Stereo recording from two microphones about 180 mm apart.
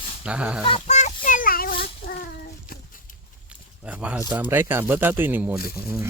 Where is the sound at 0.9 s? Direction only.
45° left (ahead or behind).